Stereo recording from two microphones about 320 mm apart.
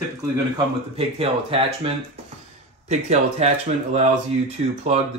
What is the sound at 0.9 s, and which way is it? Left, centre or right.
Speech, centre.